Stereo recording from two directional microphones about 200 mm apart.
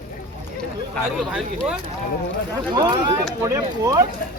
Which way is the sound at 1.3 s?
5° right (ahead or behind).